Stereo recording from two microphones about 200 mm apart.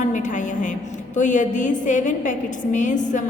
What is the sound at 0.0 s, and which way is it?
A woman's voice, 40° left (ahead or behind).